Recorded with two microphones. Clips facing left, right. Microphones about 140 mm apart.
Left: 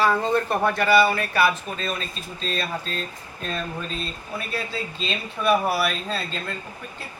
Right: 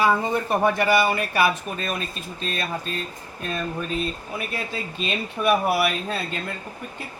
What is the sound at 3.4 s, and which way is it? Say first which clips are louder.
Speech: right 2 dB; 10° right (ahead or behind).